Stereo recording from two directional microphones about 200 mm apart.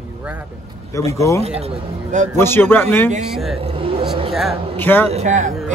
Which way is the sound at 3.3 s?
Centre (ahead or behind).